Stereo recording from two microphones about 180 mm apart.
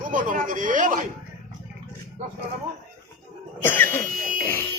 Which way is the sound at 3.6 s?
10° left (ahead or behind).